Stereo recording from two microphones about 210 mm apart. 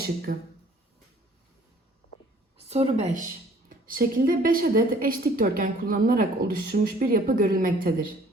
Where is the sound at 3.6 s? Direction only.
45° right (ahead or behind).